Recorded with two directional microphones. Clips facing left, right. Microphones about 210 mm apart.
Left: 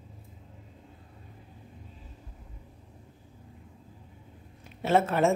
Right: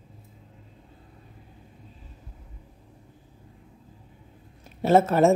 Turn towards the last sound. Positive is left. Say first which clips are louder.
# right 5 dB
turn(degrees=-40)  # may be behind; listen again after turning